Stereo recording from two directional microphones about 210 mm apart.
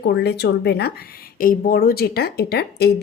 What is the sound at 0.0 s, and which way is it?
A woman's voice, 50° left (ahead or behind).